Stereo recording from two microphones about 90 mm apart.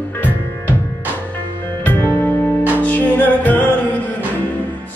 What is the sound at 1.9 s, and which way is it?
Music, 20° left (ahead or behind).